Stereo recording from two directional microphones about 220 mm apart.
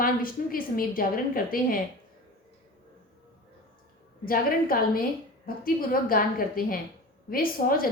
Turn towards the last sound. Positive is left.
turn(degrees=40)  # may be behind; listen again after turning